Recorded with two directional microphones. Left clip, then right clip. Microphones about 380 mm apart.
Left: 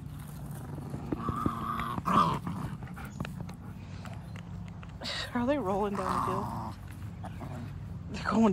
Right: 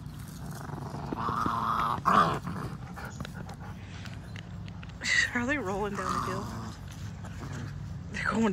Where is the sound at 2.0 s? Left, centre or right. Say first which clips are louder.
Right 2 dB; centre.